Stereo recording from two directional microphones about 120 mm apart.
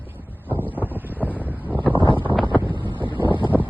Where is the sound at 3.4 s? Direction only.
15° right (ahead or behind).